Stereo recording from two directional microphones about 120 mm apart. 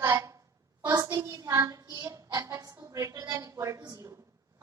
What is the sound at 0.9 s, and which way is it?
A woman's voice, 30° right (ahead or behind).